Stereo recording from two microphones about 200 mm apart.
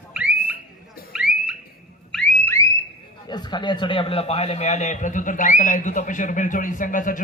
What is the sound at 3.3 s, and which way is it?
A man's voice, 20° left (ahead or behind).